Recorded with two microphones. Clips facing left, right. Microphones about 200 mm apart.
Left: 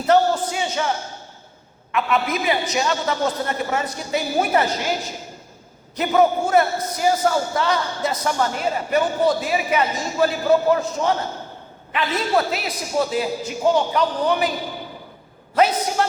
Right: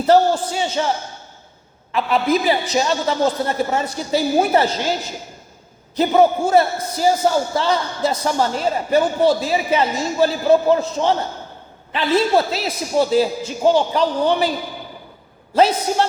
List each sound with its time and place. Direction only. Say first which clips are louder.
0.1 s a sound: right 2 dB; 30° right (ahead or behind)
1.9 s a woman's voice: right 4 dB; 30° right (ahead or behind)
6.0 s a man's voice: right 3 dB; 30° right (ahead or behind)
15.5 s a man's voice: right 3 dB; 30° right (ahead or behind)